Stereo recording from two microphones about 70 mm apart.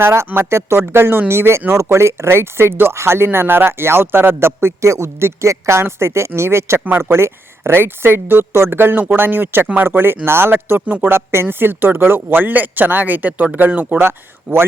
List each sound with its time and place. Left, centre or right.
0.0 s a man's voice: right